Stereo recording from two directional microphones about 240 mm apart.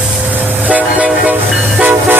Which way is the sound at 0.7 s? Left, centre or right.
Centre.